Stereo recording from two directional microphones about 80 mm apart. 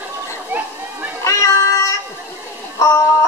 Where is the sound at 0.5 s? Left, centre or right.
Right.